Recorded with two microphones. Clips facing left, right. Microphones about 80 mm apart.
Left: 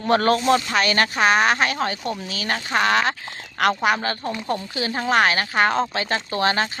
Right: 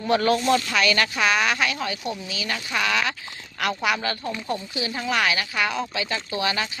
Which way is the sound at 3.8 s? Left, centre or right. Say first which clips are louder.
Left 3 dB; left.